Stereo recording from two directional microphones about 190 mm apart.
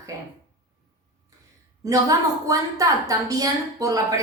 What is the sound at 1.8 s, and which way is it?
A woman's voice, 20° right (ahead or behind).